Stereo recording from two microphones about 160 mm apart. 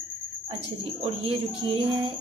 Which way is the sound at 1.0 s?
35° right (ahead or behind).